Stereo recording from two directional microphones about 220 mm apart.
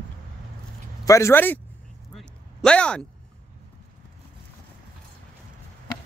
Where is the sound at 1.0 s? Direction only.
15° left (ahead or behind).